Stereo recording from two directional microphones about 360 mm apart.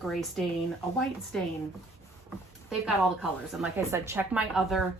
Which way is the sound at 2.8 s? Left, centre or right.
Centre.